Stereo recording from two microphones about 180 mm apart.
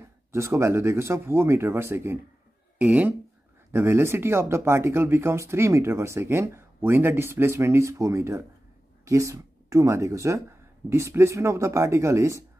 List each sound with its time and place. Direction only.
0.0 s speech: 15° right (ahead or behind)